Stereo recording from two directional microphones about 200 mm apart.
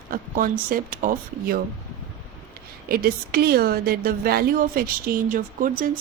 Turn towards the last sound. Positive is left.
turn(degrees=-45)  # may be behind; listen again after turning